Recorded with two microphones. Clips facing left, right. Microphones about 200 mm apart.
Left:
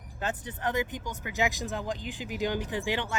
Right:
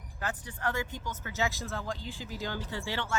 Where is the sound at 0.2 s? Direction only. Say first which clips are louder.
Left 3 dB; 20° left (ahead or behind).